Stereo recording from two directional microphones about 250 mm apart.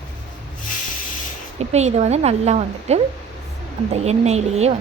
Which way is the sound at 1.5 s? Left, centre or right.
Right.